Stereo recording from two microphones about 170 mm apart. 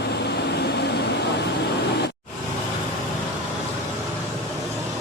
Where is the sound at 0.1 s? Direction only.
75° left (ahead or behind).